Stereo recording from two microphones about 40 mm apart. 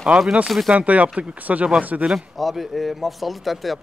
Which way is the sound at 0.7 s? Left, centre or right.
Right.